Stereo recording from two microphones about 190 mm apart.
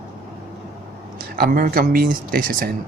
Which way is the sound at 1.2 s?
50° right (ahead or behind).